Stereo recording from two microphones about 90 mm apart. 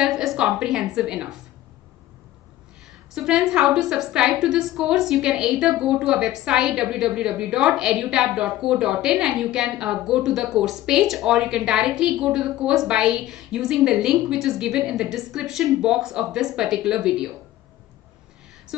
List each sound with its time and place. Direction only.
0.0 s a woman's voice: centre (ahead or behind)
3.2 s a woman's voice: 5° right (ahead or behind)